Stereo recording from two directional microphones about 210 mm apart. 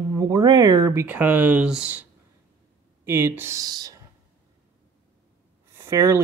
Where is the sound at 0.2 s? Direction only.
15° right (ahead or behind).